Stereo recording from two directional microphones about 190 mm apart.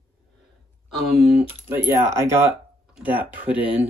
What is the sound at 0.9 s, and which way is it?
Speech, centre (ahead or behind).